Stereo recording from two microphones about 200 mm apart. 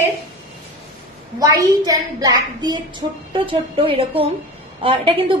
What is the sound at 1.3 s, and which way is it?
A woman's voice, 15° right (ahead or behind).